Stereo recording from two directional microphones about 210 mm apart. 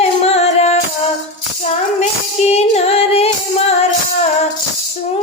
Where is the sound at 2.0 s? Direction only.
30° left (ahead or behind).